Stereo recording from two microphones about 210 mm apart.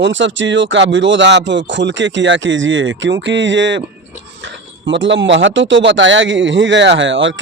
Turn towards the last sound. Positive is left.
turn(degrees=-60)  # may be behind; listen again after turning